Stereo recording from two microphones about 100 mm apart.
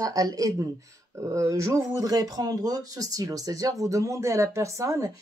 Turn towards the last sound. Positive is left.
turn(degrees=-35)  # may be behind; listen again after turning